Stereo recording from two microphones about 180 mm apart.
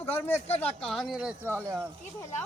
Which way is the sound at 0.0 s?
10° left (ahead or behind).